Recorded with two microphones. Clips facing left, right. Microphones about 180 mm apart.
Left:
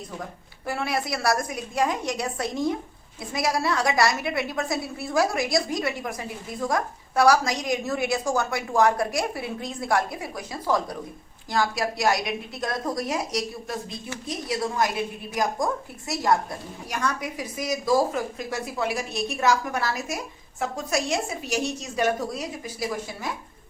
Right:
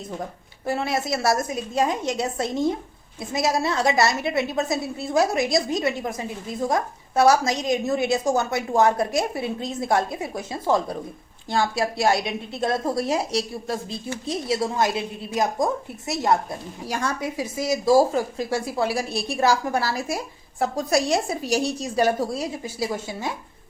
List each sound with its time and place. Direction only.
0.6 s a woman's voice: 25° right (ahead or behind)